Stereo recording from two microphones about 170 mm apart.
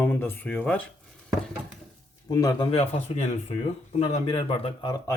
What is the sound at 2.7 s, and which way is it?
Speech, 40° left (ahead or behind).